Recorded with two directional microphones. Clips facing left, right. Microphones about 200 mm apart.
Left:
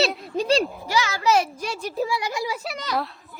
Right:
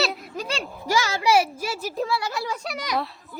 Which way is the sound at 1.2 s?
10° right (ahead or behind).